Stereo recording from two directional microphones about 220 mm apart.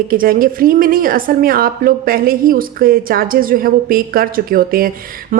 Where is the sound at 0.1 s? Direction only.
40° right (ahead or behind).